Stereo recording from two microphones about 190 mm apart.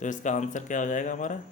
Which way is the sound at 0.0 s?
40° left (ahead or behind).